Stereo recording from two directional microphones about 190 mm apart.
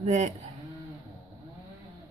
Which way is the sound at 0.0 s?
35° right (ahead or behind).